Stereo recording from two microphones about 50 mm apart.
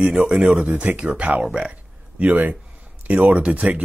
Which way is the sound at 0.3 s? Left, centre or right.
Right.